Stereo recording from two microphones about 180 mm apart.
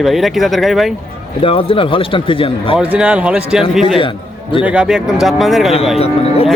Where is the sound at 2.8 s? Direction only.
5° right (ahead or behind).